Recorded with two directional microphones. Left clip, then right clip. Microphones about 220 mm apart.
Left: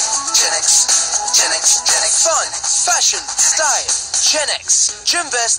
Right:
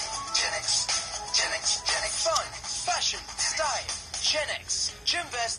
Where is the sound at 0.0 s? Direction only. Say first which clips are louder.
Left 13 dB; 45° left (ahead or behind).